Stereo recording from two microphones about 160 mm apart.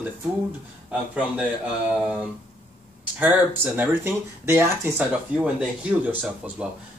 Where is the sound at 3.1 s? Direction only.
10° right (ahead or behind).